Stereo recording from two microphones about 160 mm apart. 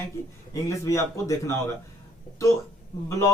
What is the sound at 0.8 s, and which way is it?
Speech, 20° left (ahead or behind).